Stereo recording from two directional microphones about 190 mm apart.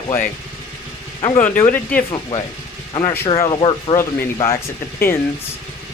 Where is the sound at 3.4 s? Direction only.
25° left (ahead or behind).